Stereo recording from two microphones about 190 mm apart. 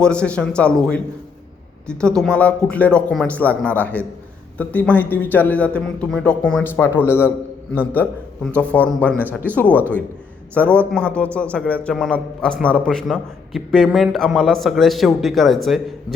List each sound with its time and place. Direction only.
0.0 s a man's voice: 5° left (ahead or behind)
8.7 s a man's voice: 5° left (ahead or behind)